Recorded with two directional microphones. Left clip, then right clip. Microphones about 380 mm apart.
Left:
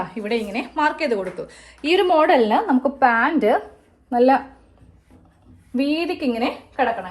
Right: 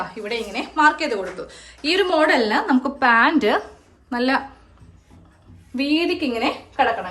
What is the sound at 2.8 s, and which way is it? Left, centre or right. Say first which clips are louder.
A woman's voice: right 1 dB; centre.